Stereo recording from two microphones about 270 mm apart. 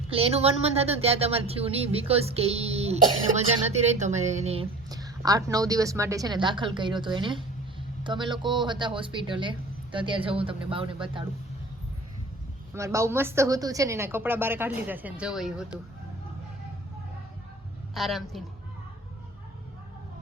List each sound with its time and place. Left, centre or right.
0.1 s a woman's voice: right
12.7 s a woman's voice: centre
17.9 s speech: centre